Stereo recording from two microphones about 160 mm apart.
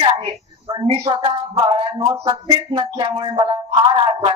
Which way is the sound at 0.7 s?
30° right (ahead or behind).